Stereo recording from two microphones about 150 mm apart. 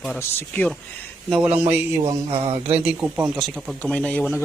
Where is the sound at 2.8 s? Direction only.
10° right (ahead or behind); by 4.4 s 10° left (ahead or behind).